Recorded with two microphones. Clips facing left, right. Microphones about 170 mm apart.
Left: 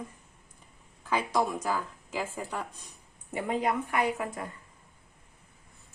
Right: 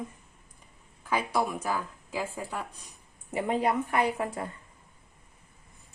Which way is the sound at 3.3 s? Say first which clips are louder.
Right 2 dB; 25° right (ahead or behind).